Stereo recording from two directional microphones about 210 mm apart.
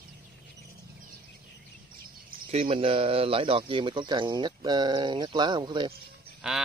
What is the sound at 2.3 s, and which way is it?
Speech, 30° right (ahead or behind).